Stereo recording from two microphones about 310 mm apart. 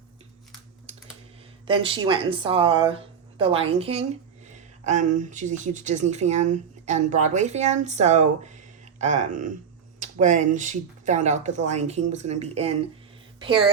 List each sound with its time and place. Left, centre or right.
1.6 s speech: centre